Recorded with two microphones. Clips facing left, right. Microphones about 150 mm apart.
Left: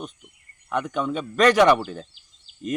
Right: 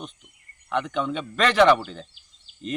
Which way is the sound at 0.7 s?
5° left (ahead or behind).